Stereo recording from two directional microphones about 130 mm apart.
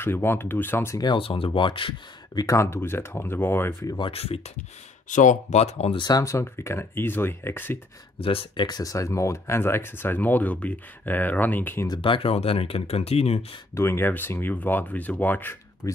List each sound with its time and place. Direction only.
0.0 s speech: 20° left (ahead or behind)
0.9 s speech: 35° left (ahead or behind)
2.4 s speech: 20° left (ahead or behind)
4.1 s speech: 50° left (ahead or behind)
5.1 s speech: 70° left (ahead or behind); by 5.9 s 55° left (ahead or behind)
5.9 s speech: 30° left (ahead or behind)
8.2 s speech: 45° left (ahead or behind); by 11.9 s 15° left (ahead or behind)
11.9 s speech: 40° left (ahead or behind)
13.7 s speech: 20° left (ahead or behind)
15.8 s speech: 25° left (ahead or behind)